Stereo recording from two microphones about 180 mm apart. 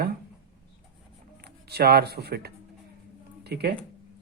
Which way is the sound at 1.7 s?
60° right (ahead or behind).